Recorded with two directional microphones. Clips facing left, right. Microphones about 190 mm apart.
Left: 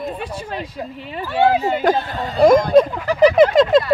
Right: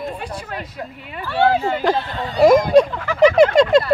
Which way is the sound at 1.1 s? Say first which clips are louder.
Left 1 dB; 20° left (ahead or behind).